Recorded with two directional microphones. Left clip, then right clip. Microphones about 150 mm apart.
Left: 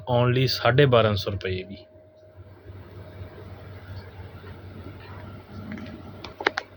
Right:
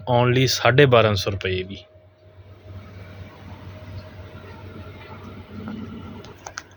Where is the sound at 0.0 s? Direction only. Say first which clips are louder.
Right 4 dB; 35° right (ahead or behind).